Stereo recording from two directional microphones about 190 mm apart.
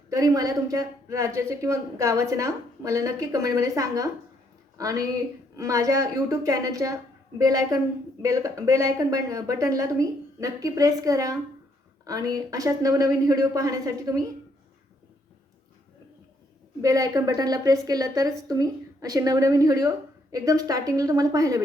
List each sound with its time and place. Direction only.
0.1 s speech: 20° right (ahead or behind)
16.8 s a woman's voice: 15° right (ahead or behind)